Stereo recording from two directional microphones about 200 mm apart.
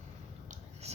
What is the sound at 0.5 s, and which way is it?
Whispering, 30° right (ahead or behind).